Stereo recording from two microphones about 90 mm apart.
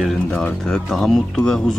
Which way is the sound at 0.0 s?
5° left (ahead or behind).